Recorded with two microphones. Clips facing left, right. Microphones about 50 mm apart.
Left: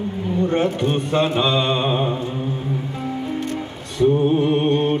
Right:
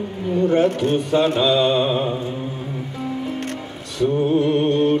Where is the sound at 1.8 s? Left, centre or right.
Centre.